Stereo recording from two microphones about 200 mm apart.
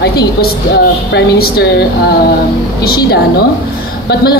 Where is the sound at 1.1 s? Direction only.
50° left (ahead or behind).